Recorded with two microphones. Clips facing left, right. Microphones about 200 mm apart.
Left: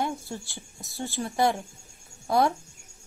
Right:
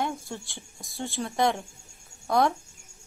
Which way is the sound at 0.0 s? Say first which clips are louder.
Left 1 dB; 5° left (ahead or behind).